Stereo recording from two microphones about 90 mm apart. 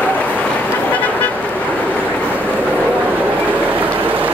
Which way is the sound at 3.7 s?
20° right (ahead or behind).